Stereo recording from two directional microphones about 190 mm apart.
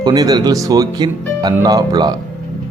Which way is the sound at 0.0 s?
20° right (ahead or behind).